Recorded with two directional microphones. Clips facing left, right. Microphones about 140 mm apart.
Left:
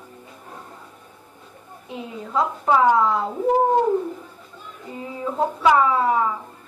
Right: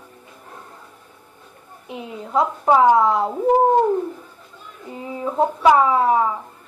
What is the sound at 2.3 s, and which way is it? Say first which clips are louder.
Speech: right 3 dB; 20° right (ahead or behind).